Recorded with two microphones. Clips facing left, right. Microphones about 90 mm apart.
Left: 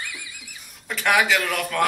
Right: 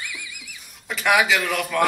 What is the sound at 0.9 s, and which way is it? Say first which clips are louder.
Speech: right 1 dB; 5° right (ahead or behind).